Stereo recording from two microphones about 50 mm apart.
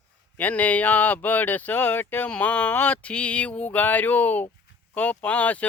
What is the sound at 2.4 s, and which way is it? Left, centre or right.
Speech, left.